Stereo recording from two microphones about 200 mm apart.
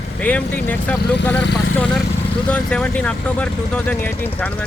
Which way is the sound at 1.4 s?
60° left (ahead or behind).